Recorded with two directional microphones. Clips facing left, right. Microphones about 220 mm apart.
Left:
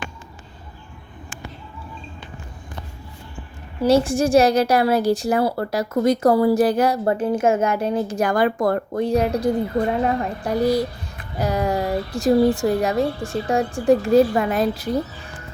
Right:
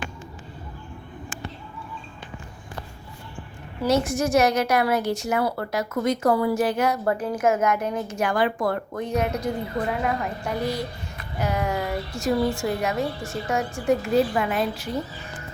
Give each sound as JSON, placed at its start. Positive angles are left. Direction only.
{"t": 3.8, "sound": "a woman's voice", "side_deg": 30}